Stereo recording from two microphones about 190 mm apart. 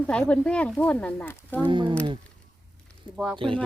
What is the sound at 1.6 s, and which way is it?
Speech, 25° right (ahead or behind).